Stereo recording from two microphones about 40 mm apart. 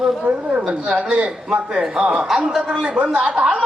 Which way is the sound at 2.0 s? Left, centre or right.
Centre.